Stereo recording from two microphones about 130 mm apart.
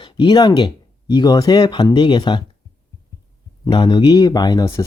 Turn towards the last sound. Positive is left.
turn(degrees=30)  # may be behind; listen again after turning